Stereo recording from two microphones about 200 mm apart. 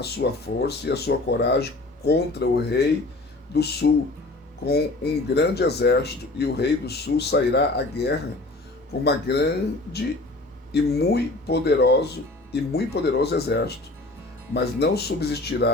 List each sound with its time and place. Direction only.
0.0 s speech: 55° left (ahead or behind)
10.7 s speech: 55° left (ahead or behind)